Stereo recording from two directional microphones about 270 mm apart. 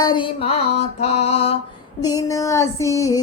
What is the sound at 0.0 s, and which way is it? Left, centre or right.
Music, centre.